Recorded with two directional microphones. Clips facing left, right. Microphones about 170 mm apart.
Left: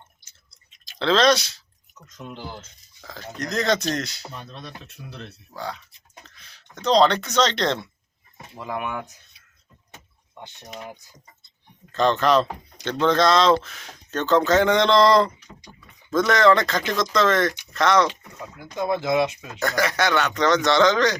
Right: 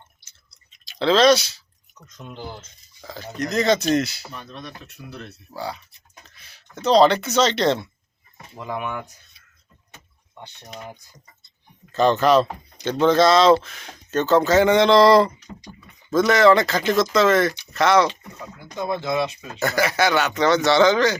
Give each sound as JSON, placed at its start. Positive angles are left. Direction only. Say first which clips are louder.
{"t": 0.2, "sound": "chewing", "louder": "even", "side_deg": 50}
{"t": 0.9, "sound": "speech", "louder": "right 3 dB", "side_deg": -5}
{"t": 4.3, "sound": "speech", "louder": "right 1 dB", "side_deg": 30}
{"t": 5.0, "sound": "speech", "louder": "right 3 dB", "side_deg": 5}
{"t": 5.5, "sound": "speech", "louder": "right 2 dB", "side_deg": -10}
{"t": 11.9, "sound": "speech", "louder": "right 3 dB", "side_deg": -5}
{"t": 18.6, "sound": "speech", "louder": "left 2 dB", "side_deg": 10}
{"t": 19.5, "sound": "speech", "louder": "right 2 dB", "side_deg": -5}